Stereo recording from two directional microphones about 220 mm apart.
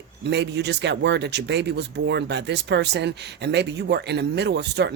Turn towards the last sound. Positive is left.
turn(degrees=-50)  # may be behind; listen again after turning